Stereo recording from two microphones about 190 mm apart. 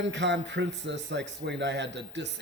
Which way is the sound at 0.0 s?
70° right (ahead or behind).